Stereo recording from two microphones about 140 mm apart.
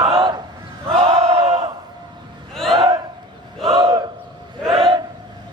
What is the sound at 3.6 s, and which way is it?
Battle cry, 40° right (ahead or behind).